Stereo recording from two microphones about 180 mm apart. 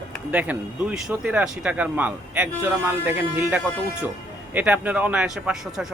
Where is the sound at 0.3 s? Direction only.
10° right (ahead or behind).